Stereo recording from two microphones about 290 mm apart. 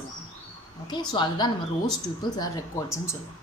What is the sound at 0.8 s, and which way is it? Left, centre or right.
Speech, centre.